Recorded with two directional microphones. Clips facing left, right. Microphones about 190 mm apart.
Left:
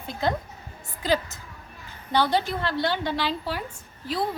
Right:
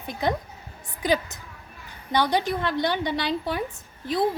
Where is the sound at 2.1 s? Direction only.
15° right (ahead or behind).